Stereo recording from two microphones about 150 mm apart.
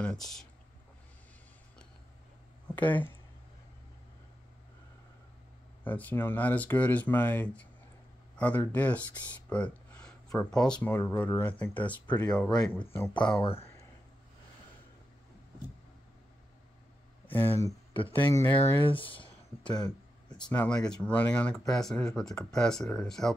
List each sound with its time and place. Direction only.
0.0 s speech: 5° left (ahead or behind)
2.7 s speech: 10° left (ahead or behind)
5.9 s speech: 10° left (ahead or behind)
9.5 s a sound: 5° left (ahead or behind)
10.5 s speech: 5° left (ahead or behind)
13.4 s speech: 40° left (ahead or behind)
17.3 s speech: 15° left (ahead or behind)
17.9 s speech: 35° left (ahead or behind)
18.3 s speech: 15° left (ahead or behind)
18.9 s a sound: 35° left (ahead or behind)
20.5 s speech: 5° left (ahead or behind)